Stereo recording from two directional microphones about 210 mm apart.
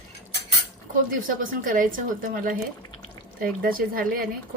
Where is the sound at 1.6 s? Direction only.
40° right (ahead or behind).